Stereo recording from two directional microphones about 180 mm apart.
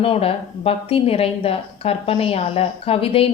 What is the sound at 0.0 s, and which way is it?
A woman's voice, 30° left (ahead or behind).